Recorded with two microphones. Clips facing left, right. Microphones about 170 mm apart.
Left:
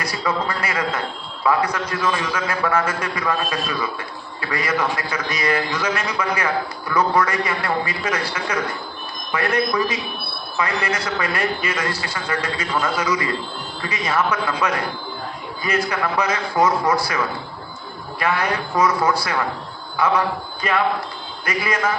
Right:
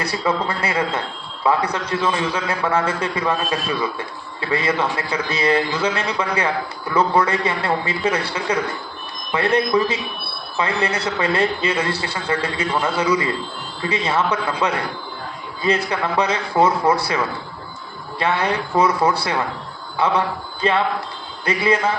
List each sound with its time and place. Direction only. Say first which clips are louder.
0.0 s a man's voice: right 2 dB; 30° right (ahead or behind)
9.3 s a man's voice: right 3 dB; 30° right (ahead or behind)
18.2 s a man's voice: right 1 dB; 25° right (ahead or behind)